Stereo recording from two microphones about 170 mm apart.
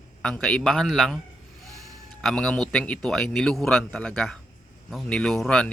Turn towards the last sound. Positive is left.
turn(degrees=5)  # may be behind; listen again after turning